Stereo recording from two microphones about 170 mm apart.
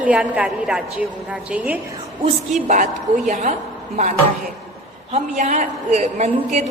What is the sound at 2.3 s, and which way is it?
A woman's voice, 45° right (ahead or behind).